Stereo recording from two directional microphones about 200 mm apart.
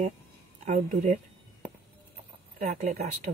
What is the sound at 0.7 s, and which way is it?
Speech, 40° right (ahead or behind).